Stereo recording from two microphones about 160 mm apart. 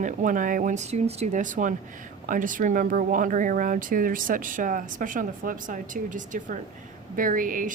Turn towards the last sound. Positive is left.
turn(degrees=-60)  # may be behind; listen again after turning